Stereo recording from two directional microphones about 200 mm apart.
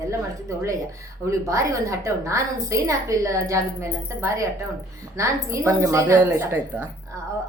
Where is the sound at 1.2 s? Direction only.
15° right (ahead or behind).